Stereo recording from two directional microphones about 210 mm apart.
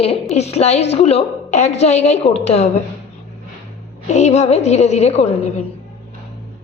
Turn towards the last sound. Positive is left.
turn(degrees=30)  # may be behind; listen again after turning